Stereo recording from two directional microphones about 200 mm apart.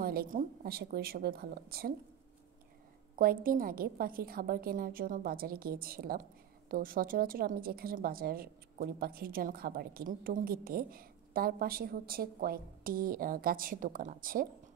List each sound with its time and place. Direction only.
0.0 s a woman's voice: 50° right (ahead or behind)
3.2 s a woman's voice: 45° right (ahead or behind)